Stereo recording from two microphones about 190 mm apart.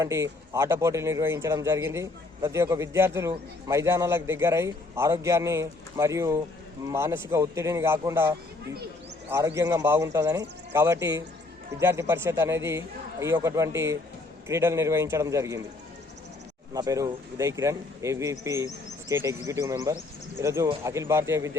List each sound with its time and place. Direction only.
0.0 s a man's voice: 15° right (ahead or behind)
16.7 s a man's voice: 20° right (ahead or behind)